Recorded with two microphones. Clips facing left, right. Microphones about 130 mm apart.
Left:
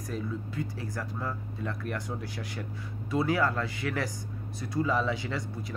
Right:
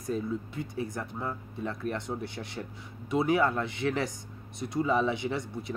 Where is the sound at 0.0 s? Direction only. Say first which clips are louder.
Right 3 dB; 25° right (ahead or behind).